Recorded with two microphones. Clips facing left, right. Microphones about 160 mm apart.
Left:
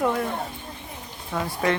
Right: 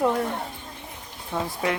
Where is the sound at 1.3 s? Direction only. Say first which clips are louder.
Left 2 dB; 15° right (ahead or behind).